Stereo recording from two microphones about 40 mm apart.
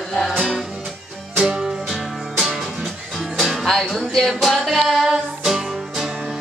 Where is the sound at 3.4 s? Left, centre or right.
Centre.